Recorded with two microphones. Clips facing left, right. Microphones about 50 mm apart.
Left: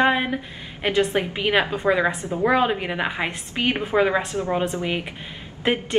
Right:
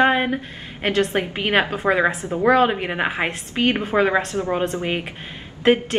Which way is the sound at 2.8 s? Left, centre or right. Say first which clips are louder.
Right 2 dB; centre.